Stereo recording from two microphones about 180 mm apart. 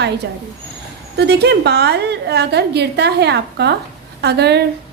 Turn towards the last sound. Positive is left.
turn(degrees=-65)  # may be behind; listen again after turning